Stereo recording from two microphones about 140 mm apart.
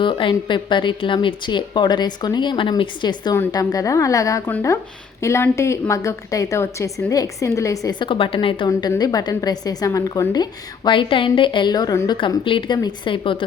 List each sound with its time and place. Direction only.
0.0 s a woman's voice: 35° left (ahead or behind)